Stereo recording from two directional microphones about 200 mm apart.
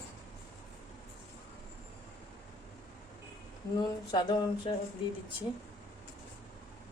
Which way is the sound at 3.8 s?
20° left (ahead or behind).